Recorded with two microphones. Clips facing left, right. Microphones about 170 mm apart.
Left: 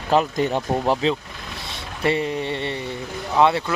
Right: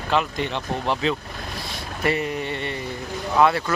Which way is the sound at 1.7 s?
25° left (ahead or behind).